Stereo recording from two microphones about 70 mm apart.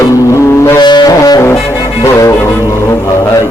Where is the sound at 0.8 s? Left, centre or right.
Left.